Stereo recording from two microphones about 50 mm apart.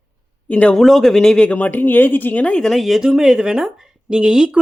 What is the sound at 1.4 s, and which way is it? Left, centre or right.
Speech, left.